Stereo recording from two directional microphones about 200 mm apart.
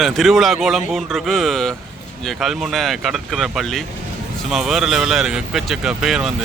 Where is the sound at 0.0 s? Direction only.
Centre (ahead or behind).